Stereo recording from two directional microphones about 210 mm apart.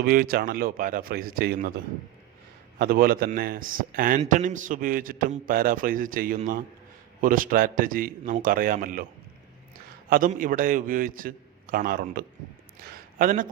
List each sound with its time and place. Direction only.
0.0 s a man's voice: 45° right (ahead or behind)
2.7 s a man's voice: 45° right (ahead or behind)
10.1 s a man's voice: 40° right (ahead or behind)